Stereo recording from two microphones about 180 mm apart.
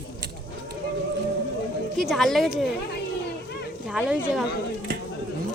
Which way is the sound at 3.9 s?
5° right (ahead or behind).